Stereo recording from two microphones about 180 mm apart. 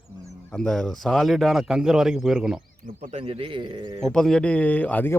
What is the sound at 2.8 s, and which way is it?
A man's voice, 40° right (ahead or behind).